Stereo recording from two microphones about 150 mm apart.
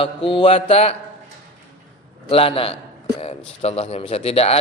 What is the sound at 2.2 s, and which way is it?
A man's voice, 40° left (ahead or behind).